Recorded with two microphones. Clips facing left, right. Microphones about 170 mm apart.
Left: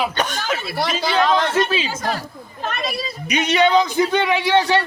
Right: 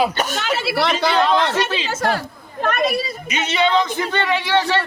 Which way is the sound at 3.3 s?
15° left (ahead or behind).